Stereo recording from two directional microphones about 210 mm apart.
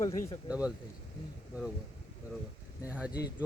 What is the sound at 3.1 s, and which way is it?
Speech, 20° left (ahead or behind).